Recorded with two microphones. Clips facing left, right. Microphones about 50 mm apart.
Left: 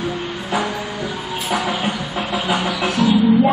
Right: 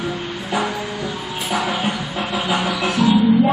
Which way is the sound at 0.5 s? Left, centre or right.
Centre.